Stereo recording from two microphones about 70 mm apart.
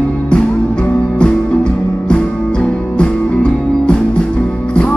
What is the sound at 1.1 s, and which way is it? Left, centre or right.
Music, centre.